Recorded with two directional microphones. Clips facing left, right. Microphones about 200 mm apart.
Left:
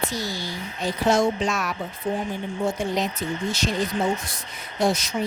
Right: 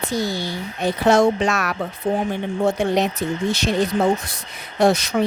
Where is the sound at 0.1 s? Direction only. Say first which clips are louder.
Right 7 dB; 60° right (ahead or behind).